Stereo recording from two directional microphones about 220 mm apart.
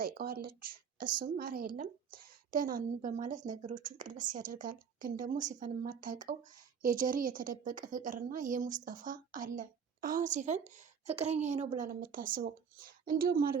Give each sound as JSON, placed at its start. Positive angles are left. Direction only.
{"t": 0.0, "sound": "a woman's voice", "side_deg": -40}